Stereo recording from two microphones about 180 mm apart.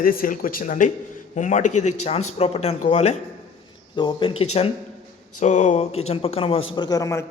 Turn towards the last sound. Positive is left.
turn(degrees=15)  # may be behind; listen again after turning